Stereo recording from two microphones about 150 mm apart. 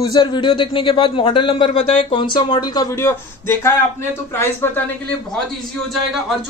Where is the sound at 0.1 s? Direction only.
30° left (ahead or behind); by 4.8 s 15° left (ahead or behind).